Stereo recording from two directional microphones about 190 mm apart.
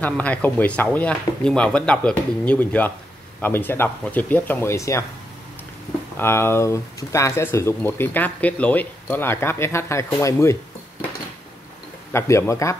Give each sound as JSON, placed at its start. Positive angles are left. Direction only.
{"t": 0.0, "sound": "speech", "side_deg": 10}
{"t": 6.1, "sound": "speech", "side_deg": 10}
{"t": 12.1, "sound": "speech", "side_deg": 15}